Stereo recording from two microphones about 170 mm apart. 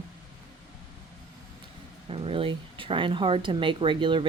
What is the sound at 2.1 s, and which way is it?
Speech, 35° right (ahead or behind).